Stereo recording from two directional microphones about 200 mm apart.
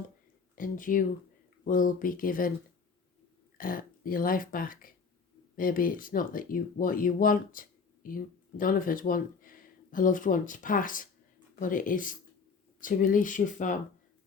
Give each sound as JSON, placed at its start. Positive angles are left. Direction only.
{"t": 0.5, "sound": "speech", "side_deg": 40}
{"t": 3.6, "sound": "speech", "side_deg": 45}